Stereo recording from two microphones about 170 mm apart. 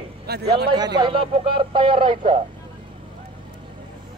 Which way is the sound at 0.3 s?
75° right (ahead or behind).